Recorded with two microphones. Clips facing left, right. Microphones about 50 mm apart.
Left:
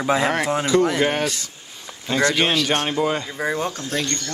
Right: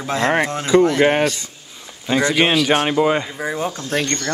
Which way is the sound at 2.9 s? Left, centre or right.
Right.